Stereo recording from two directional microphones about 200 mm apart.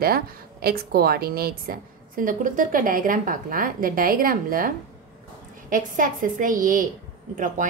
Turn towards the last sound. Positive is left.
turn(degrees=-40)  # may be behind; listen again after turning